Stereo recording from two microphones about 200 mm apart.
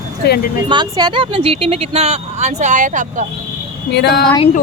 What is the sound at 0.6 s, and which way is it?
Speech, 25° right (ahead or behind).